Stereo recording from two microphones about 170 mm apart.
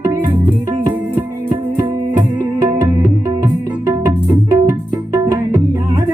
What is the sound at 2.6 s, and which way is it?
Music, 20° right (ahead or behind).